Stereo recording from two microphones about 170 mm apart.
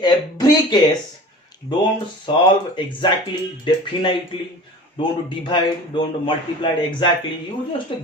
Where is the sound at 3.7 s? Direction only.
30° left (ahead or behind).